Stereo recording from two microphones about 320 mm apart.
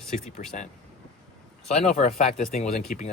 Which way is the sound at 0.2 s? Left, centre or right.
Left.